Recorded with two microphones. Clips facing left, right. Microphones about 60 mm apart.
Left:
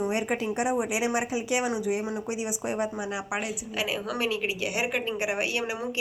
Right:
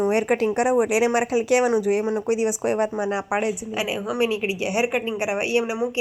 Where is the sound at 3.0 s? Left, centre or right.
Right.